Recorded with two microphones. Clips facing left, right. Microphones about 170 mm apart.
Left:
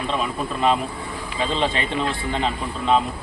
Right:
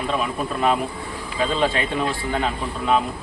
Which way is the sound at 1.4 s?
5° right (ahead or behind).